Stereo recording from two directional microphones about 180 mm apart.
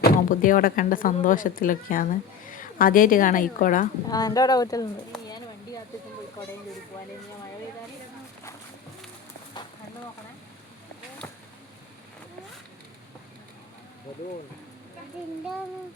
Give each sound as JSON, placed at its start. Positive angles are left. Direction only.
{"t": 0.0, "sound": "speech", "side_deg": 50}
{"t": 4.1, "sound": "speech", "side_deg": 20}
{"t": 6.4, "sound": "speech", "side_deg": 20}